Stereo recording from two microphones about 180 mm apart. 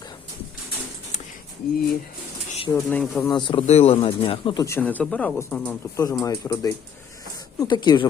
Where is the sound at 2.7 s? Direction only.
5° left (ahead or behind).